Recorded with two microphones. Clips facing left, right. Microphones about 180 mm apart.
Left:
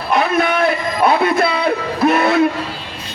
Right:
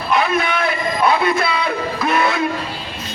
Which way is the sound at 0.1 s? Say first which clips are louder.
Left 2 dB; 50° left (ahead or behind).